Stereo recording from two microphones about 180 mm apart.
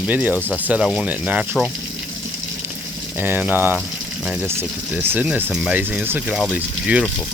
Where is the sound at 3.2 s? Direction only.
10° right (ahead or behind).